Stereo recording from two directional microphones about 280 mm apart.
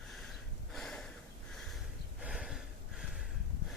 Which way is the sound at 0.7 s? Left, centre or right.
Centre.